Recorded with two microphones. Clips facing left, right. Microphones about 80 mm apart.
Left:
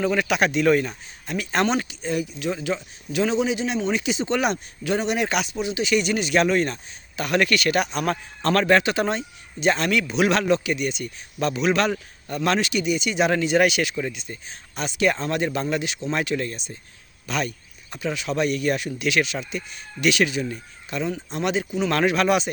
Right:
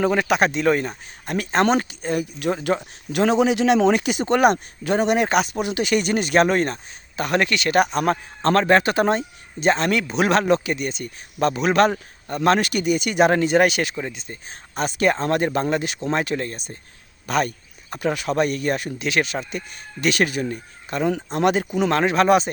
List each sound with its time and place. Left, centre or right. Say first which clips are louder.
0.0 s speech: right 3 dB; right
1.2 s speech: right 3 dB; right
4.0 s speech: right 5 dB; right
5.5 s speech: right 1 dB; right
21.8 s speech: right 3 dB; right